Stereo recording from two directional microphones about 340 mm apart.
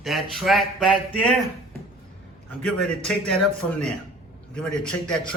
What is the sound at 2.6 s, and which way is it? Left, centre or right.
Speech, centre.